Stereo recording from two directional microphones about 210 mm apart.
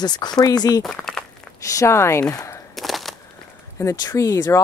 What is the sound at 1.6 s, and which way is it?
Speech, 15° left (ahead or behind).